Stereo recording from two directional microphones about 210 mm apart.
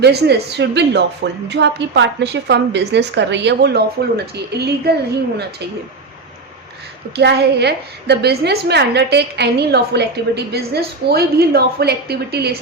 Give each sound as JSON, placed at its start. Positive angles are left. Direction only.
{"t": 0.0, "sound": "a woman's voice", "side_deg": -50}
{"t": 7.2, "sound": "a woman's voice", "side_deg": -50}